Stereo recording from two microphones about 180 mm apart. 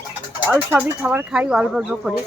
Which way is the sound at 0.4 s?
10° right (ahead or behind).